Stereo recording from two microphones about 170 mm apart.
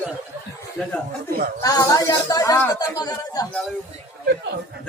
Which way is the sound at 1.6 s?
20° left (ahead or behind).